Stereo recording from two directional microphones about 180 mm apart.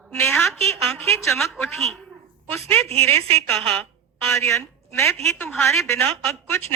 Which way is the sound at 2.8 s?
35° right (ahead or behind).